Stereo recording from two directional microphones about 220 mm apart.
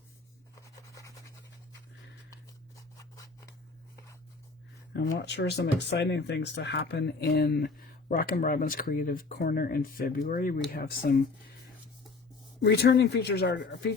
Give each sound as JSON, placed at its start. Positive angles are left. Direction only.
{"t": 2.3, "sound": "scissors", "side_deg": 15}
{"t": 4.9, "sound": "speech", "side_deg": 50}
{"t": 12.6, "sound": "speech", "side_deg": 50}